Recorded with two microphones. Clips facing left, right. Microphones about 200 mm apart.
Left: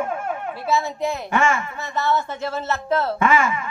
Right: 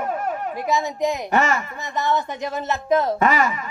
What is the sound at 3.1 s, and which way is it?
Speech, 40° right (ahead or behind).